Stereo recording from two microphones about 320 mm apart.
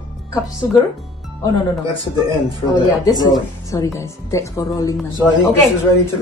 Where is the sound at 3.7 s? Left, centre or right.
Centre.